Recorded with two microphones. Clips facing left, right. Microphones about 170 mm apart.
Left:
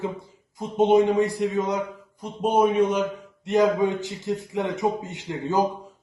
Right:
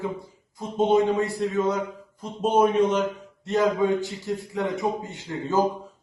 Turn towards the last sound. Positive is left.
turn(degrees=20)  # may be behind; listen again after turning